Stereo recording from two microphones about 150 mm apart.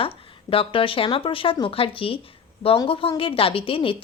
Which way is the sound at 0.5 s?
35° left (ahead or behind).